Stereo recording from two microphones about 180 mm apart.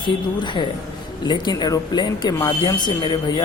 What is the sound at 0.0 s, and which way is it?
Speech, 25° left (ahead or behind).